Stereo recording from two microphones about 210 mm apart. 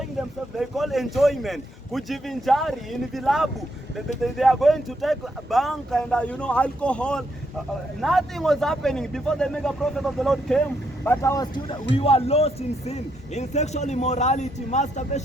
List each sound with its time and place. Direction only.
0.5 s speech: centre (ahead or behind); by 11.6 s 15° left (ahead or behind)
11.9 s speech: 30° left (ahead or behind)